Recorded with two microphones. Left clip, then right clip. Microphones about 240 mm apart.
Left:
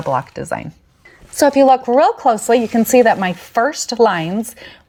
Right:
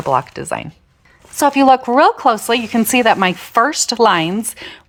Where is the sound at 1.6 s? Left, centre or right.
Right.